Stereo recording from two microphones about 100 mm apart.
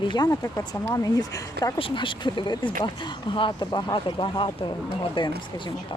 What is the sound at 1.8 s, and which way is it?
Speech, 55° left (ahead or behind).